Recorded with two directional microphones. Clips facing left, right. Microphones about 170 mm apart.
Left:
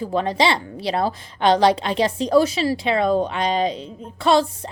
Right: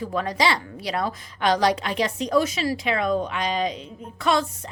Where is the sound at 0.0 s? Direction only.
25° left (ahead or behind).